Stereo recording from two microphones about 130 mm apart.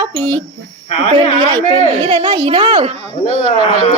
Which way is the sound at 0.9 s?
55° left (ahead or behind).